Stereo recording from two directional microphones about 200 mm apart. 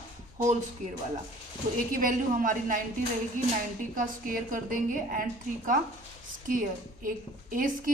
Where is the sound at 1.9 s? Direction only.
45° right (ahead or behind).